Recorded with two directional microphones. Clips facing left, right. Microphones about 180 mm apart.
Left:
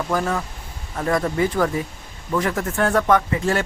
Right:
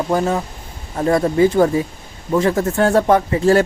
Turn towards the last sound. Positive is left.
turn(degrees=-35)  # may be behind; listen again after turning